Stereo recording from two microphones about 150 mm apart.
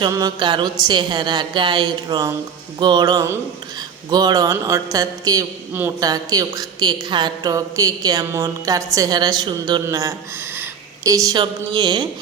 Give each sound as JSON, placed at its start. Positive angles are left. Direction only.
{"t": 0.0, "sound": "a woman's voice", "side_deg": -25}